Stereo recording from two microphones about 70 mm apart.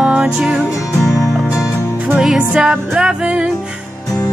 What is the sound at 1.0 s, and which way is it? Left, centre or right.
Music, left.